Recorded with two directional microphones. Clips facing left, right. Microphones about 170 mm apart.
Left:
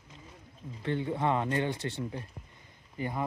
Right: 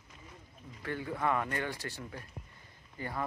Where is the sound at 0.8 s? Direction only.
25° left (ahead or behind).